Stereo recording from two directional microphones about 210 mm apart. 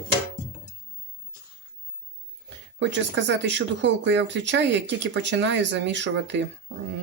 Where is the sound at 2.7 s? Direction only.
60° right (ahead or behind).